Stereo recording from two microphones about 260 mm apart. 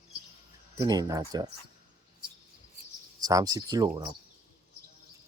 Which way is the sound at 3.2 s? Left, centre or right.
Centre.